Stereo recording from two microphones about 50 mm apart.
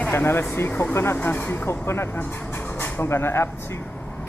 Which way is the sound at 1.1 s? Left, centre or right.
Left.